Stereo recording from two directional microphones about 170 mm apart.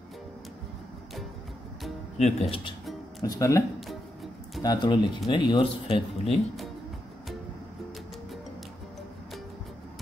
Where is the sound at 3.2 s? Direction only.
20° left (ahead or behind).